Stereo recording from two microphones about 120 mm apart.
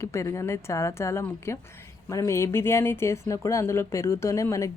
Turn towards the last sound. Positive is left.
turn(degrees=25)  # may be behind; listen again after turning